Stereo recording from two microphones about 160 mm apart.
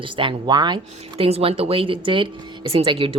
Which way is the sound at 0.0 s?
30° right (ahead or behind).